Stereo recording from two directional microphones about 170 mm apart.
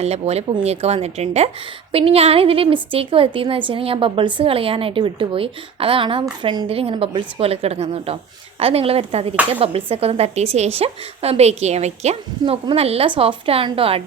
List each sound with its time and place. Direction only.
0.0 s a woman's voice: 40° right (ahead or behind)